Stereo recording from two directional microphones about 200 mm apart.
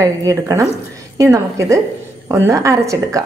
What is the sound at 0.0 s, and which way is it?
Speech, 15° right (ahead or behind).